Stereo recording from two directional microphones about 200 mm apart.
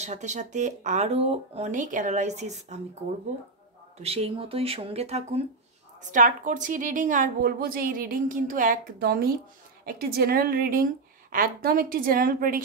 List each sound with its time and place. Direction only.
0.0 s speech: 35° right (ahead or behind)
4.0 s a woman's voice: 30° right (ahead or behind); by 12.6 s 45° right (ahead or behind)